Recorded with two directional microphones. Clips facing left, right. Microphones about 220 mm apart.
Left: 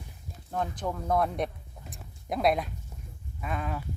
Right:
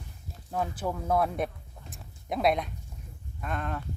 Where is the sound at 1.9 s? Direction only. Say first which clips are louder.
Even; centre (ahead or behind).